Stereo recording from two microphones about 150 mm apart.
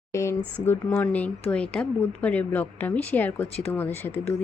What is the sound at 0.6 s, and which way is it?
Speech, 15° left (ahead or behind).